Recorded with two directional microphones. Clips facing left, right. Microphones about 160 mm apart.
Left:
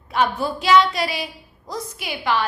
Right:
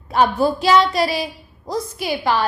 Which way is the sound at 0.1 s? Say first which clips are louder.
Right 5 dB; 40° right (ahead or behind).